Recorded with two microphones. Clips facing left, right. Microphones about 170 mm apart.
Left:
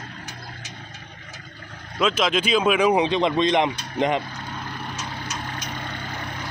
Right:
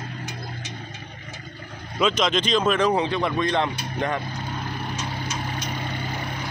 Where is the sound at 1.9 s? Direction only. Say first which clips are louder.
Even; 5° left (ahead or behind); by 4.2 s 20° left (ahead or behind).